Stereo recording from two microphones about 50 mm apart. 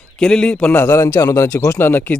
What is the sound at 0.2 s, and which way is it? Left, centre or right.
Speech, centre.